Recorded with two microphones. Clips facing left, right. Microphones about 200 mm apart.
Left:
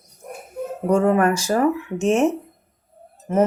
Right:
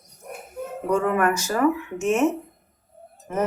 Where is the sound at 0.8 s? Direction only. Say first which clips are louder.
Left 4 dB; 30° left (ahead or behind).